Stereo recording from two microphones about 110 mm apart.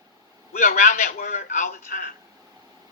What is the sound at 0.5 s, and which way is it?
A man's voice, 90° left.